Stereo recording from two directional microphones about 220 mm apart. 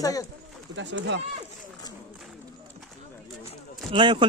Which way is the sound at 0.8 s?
55° right (ahead or behind).